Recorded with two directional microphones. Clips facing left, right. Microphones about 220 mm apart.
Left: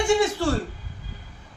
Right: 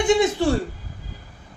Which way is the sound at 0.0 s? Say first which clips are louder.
Right 3 dB; 20° right (ahead or behind).